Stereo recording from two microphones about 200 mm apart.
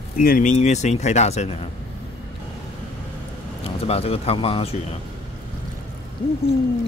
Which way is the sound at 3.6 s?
30° left (ahead or behind).